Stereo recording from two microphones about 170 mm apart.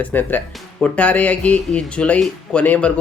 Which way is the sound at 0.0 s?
10° left (ahead or behind).